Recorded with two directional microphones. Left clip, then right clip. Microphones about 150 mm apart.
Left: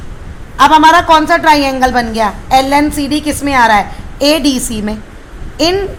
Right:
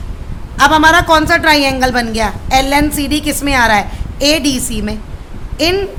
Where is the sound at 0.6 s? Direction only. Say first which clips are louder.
Left 3 dB; centre (ahead or behind).